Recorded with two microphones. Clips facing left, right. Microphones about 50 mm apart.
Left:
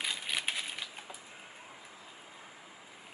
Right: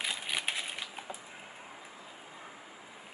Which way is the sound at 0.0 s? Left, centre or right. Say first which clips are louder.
Right 1 dB; centre.